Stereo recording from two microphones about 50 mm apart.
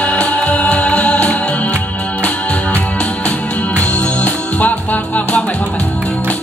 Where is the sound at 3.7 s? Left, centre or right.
Left.